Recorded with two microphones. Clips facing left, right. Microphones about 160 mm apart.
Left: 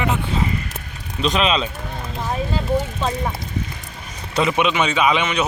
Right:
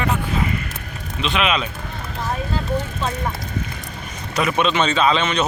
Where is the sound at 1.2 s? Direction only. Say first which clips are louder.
Left 2 dB; 35° left (ahead or behind).